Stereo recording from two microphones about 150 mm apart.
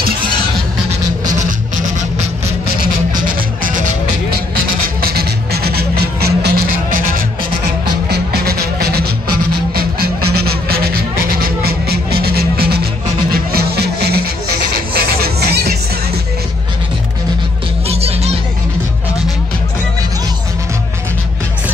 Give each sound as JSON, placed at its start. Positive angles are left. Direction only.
{"t": 2.8, "sound": "music", "side_deg": -65}
{"t": 4.8, "sound": "music", "side_deg": -90}
{"t": 8.1, "sound": "music", "side_deg": -90}
{"t": 17.8, "sound": "music", "side_deg": -45}